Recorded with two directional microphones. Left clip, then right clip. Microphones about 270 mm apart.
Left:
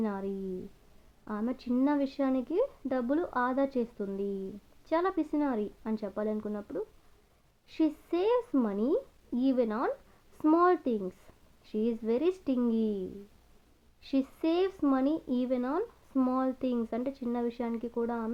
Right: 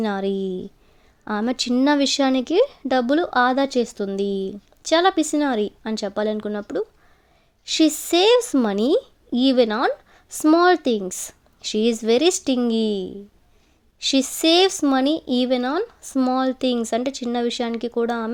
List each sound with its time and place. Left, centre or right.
0.0 s speech: right
14.1 s speech: right